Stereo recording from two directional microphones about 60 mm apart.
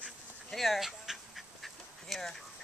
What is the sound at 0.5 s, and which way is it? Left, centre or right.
Speech, centre.